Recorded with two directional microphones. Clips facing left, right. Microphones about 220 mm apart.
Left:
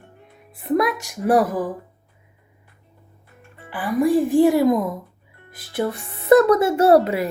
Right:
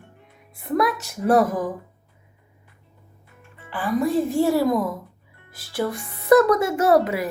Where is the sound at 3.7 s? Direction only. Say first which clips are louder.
Left 3 dB; 15° left (ahead or behind).